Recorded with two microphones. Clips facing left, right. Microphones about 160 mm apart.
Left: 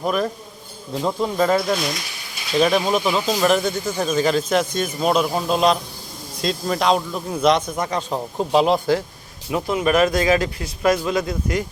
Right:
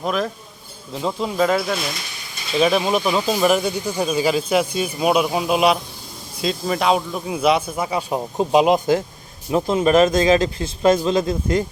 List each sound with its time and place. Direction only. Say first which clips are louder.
0.0 s speech: left 1 dB; centre (ahead or behind); by 9.0 s 15° right (ahead or behind)
9.5 s speech: right 3 dB; 25° right (ahead or behind)